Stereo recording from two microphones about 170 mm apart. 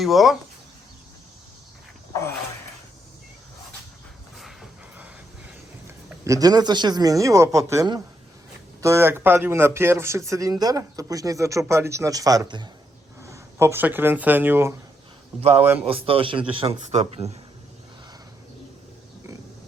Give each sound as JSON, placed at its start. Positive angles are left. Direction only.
{"t": 0.0, "sound": "speech", "side_deg": 0}
{"t": 6.2, "sound": "a man's voice", "side_deg": -20}
{"t": 15.9, "sound": "a man's voice", "side_deg": -35}